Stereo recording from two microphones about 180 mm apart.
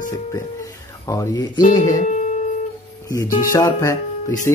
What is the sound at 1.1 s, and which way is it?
Speech, 20° left (ahead or behind).